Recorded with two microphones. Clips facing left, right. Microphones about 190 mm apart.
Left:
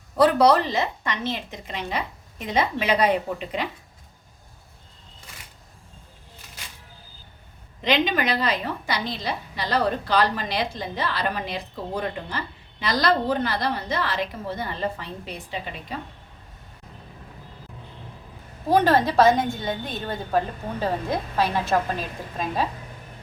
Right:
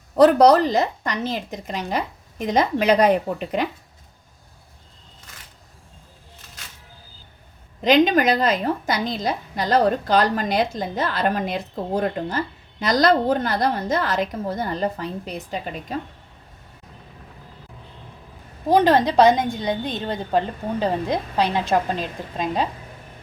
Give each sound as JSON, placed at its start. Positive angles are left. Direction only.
{"t": 0.2, "sound": "a woman's voice", "side_deg": -45}
{"t": 7.9, "sound": "a woman's voice", "side_deg": -45}
{"t": 18.7, "sound": "a woman's voice", "side_deg": -15}